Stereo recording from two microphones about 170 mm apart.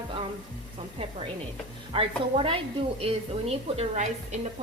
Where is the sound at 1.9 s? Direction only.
30° right (ahead or behind).